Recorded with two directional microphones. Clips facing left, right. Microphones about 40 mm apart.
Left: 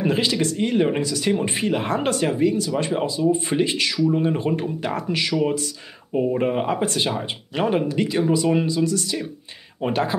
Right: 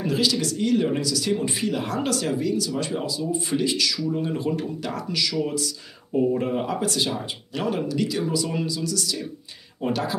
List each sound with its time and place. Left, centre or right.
0.0 s speech: left